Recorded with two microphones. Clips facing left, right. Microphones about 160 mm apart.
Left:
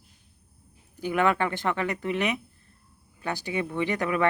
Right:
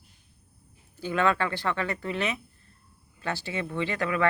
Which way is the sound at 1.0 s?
15° left (ahead or behind).